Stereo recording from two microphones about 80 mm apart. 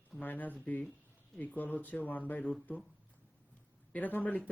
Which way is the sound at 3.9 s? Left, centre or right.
Left.